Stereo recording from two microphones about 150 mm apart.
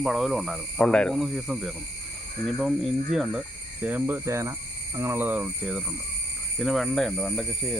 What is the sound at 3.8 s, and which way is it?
Speech, 10° right (ahead or behind).